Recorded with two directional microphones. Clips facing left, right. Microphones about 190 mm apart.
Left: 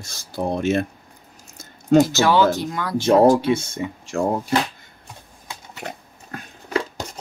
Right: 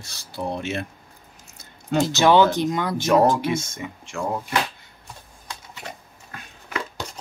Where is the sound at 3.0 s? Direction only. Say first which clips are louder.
Left 5 dB; 30° left (ahead or behind).